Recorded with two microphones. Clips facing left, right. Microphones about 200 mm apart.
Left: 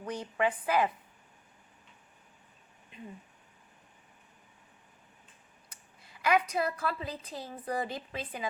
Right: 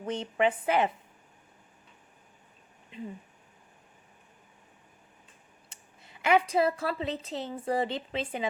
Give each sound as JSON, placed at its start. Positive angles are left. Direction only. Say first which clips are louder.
{"t": 0.0, "sound": "a woman's voice", "louder": "right 4 dB", "side_deg": -25}
{"t": 5.6, "sound": "speech", "louder": "right 2 dB", "side_deg": -25}